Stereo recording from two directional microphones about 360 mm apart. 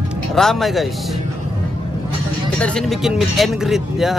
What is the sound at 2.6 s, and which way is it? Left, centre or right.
Speech, centre.